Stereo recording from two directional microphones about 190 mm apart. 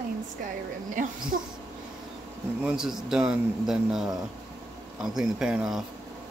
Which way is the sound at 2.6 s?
5° right (ahead or behind).